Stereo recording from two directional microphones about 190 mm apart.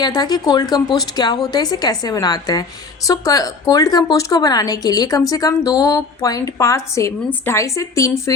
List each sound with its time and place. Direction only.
0.0 s a woman's voice: 20° left (ahead or behind)